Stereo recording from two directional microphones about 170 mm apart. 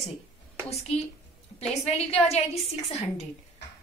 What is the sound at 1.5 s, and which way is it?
Speech, 40° left (ahead or behind).